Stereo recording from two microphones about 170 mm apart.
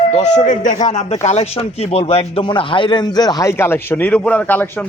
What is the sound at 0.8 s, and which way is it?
Speech, 40° left (ahead or behind).